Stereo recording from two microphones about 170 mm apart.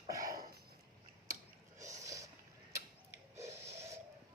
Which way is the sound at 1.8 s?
20° right (ahead or behind).